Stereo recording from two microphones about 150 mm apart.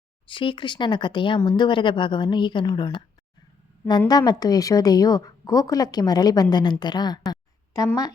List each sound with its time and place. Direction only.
0.3 s a woman's voice: 35° left (ahead or behind)
4.1 s a woman's voice: 25° left (ahead or behind)
7.3 s a sound: 25° left (ahead or behind)